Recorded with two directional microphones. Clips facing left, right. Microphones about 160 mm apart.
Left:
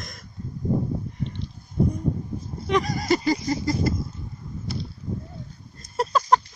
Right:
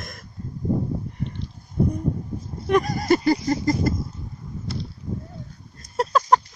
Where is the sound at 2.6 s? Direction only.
50° right (ahead or behind).